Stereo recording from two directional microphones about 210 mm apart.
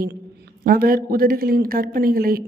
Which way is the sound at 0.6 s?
45° right (ahead or behind).